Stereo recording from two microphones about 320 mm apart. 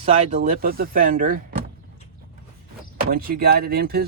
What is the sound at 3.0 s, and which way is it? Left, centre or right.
Speech, right.